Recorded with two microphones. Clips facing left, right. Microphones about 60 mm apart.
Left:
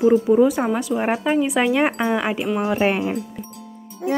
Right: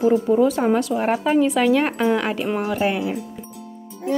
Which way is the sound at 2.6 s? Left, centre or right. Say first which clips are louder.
Left 4 dB; left.